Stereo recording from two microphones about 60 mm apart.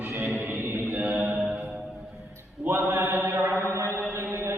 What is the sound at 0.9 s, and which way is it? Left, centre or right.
Mantra, right.